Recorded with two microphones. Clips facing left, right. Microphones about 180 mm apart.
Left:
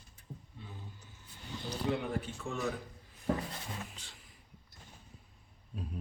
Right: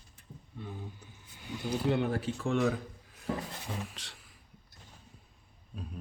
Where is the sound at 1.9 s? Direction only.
90° right.